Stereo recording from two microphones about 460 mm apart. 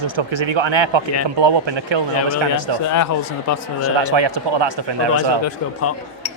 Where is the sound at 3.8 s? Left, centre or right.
Right.